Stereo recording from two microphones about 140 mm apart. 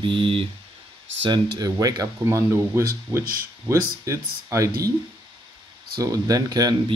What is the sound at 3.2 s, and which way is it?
Speech, 90° right.